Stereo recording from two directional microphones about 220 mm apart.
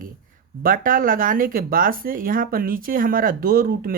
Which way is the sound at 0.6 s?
40° right (ahead or behind).